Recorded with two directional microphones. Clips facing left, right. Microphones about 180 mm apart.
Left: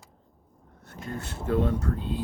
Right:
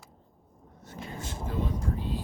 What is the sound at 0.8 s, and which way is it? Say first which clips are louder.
Vehicle: left 3 dB; 60° left (ahead or behind).